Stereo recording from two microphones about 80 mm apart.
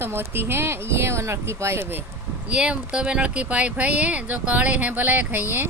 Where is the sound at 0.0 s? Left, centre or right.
Right.